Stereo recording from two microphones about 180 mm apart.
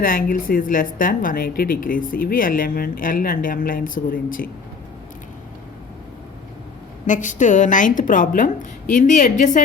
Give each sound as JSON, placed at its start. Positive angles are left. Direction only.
{"t": 0.0, "sound": "a woman's voice", "side_deg": 50}
{"t": 7.1, "sound": "a woman's voice", "side_deg": 45}